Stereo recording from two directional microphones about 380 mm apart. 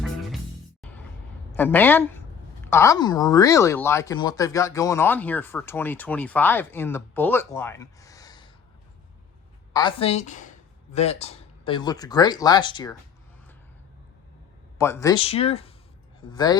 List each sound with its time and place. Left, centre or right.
0.8 s music: centre
1.5 s speech: centre
9.7 s speech: centre
14.8 s speech: centre